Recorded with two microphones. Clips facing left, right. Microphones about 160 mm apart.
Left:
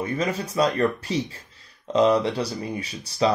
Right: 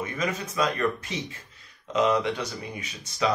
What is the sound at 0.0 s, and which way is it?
Speech, 30° left (ahead or behind).